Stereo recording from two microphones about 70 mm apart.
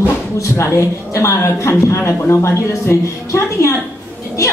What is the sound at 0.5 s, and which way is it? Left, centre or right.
Speech, left.